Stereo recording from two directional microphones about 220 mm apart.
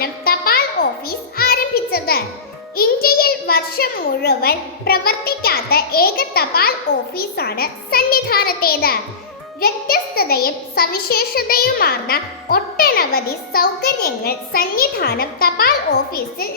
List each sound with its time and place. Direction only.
0.0 s a sound: 45° left (ahead or behind)
1.0 s music: 45° left (ahead or behind)
2.7 s a child's voice: 45° left (ahead or behind)